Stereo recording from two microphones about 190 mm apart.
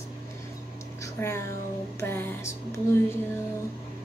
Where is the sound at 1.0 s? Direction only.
15° left (ahead or behind).